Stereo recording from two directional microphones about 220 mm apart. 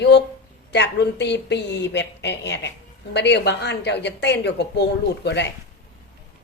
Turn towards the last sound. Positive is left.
turn(degrees=50)  # may be behind; listen again after turning